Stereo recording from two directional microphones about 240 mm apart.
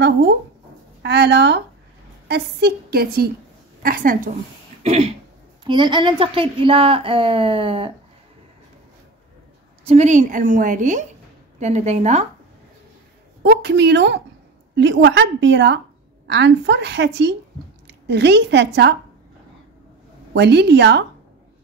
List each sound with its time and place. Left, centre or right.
1.0 s a woman's voice: right
4.8 s throat clearing: right
5.6 s a woman's voice: centre
9.8 s a woman's voice: right
13.4 s a woman's voice: right
20.3 s a woman's voice: right